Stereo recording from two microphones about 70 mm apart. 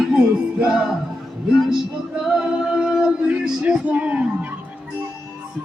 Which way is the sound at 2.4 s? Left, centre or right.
Centre.